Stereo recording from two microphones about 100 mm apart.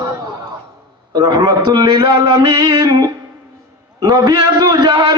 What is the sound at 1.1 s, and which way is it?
A man's voice, 45° right (ahead or behind).